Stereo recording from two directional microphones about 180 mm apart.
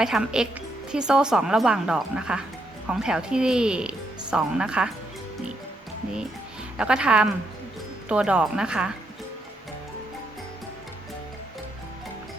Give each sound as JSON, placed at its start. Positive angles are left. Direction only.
{"t": 0.0, "sound": "speech", "side_deg": -5}
{"t": 6.7, "sound": "speech", "side_deg": -5}